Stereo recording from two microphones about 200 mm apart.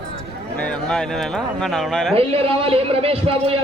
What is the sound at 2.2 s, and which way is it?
A man's voice, 30° right (ahead or behind).